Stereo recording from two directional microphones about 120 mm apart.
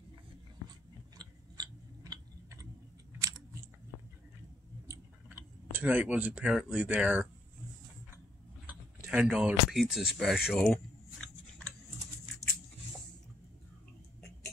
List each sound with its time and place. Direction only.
1.1 s chewing: 35° right (ahead or behind)
4.8 s clicking: 20° right (ahead or behind)
9.1 s speech: 10° right (ahead or behind)